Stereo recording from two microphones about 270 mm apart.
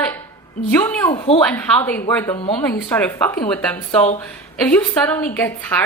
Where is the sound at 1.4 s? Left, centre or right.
Centre.